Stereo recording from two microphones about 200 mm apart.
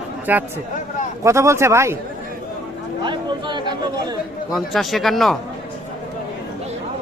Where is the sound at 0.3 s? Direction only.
10° right (ahead or behind).